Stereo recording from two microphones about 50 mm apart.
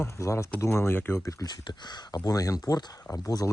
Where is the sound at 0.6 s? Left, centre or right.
Left.